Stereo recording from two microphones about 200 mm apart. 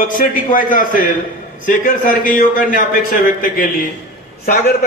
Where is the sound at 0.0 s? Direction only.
40° left (ahead or behind).